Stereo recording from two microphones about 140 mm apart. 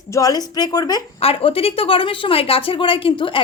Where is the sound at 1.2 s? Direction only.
45° left (ahead or behind).